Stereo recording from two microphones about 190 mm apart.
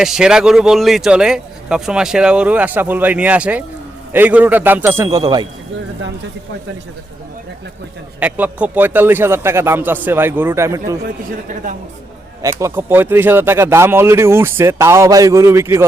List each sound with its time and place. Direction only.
0.0 s speech: 5° right (ahead or behind); by 5.5 s 20° right (ahead or behind)
8.2 s speech: 5° right (ahead or behind)
11.0 s speech: 45° right (ahead or behind)
12.4 s speech: 15° right (ahead or behind)